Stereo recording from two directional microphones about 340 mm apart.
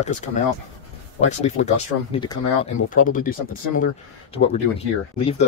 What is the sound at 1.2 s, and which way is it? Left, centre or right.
Speech, centre.